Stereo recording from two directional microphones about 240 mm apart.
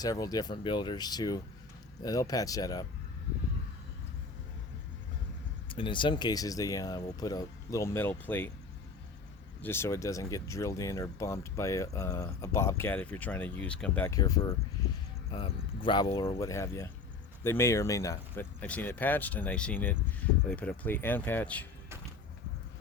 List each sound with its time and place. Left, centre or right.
0.0 s speech: centre
5.6 s speech: left
9.6 s speech: centre